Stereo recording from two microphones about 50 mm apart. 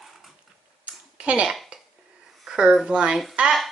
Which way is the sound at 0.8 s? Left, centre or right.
Right.